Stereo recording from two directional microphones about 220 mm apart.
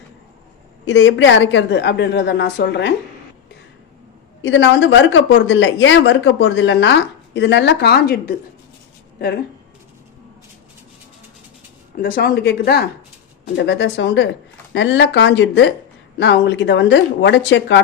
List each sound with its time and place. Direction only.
0.9 s speech: 55° left (ahead or behind)
4.4 s speech: 55° left (ahead or behind)
11.9 s speech: 45° left (ahead or behind)